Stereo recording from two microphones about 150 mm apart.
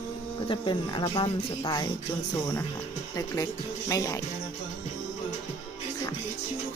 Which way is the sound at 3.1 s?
25° left (ahead or behind).